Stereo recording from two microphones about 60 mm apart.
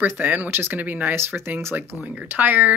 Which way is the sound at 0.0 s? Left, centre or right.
Right.